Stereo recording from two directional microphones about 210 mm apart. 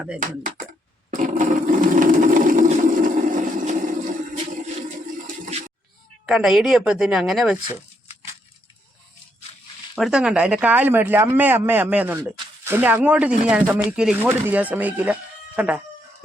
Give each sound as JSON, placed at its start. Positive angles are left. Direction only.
{"t": 1.1, "sound": "a sound", "side_deg": -40}
{"t": 6.2, "sound": "speech", "side_deg": -5}
{"t": 9.9, "sound": "speech", "side_deg": -5}